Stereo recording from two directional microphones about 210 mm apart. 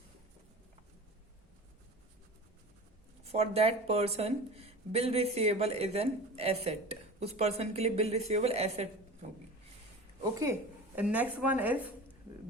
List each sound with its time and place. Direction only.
3.2 s speech: 30° right (ahead or behind)
10.4 s a woman's voice: 10° right (ahead or behind)